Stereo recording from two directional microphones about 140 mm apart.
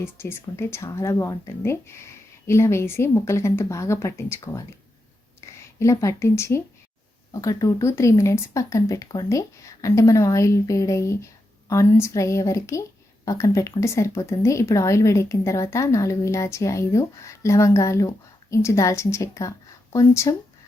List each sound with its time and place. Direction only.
0.0 s speech: 20° left (ahead or behind)
5.8 s speech: 20° left (ahead or behind)